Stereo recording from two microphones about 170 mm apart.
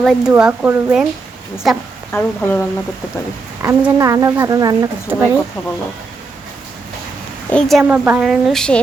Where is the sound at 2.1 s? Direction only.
15° left (ahead or behind).